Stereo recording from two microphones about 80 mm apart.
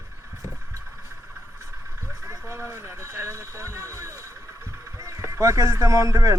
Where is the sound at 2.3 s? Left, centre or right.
Right.